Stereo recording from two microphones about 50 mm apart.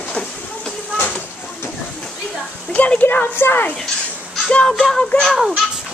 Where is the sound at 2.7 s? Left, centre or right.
Left.